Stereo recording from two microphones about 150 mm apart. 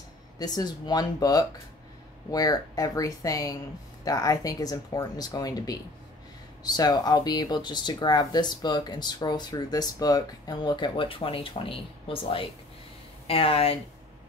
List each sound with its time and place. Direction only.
0.4 s speech: 25° left (ahead or behind)